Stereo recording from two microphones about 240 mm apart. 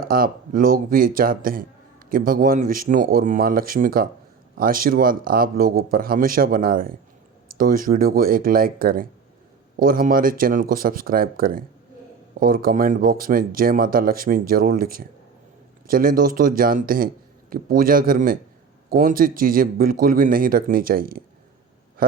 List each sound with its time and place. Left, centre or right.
0.0 s speech: right